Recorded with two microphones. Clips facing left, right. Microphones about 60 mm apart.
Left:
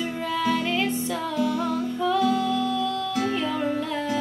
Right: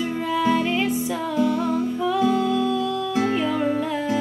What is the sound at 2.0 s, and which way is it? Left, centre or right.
Music, centre.